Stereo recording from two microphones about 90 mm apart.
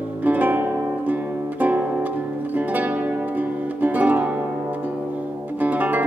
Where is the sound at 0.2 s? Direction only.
20° right (ahead or behind).